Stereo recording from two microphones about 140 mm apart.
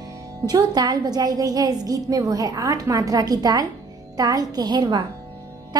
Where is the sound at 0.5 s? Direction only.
30° right (ahead or behind).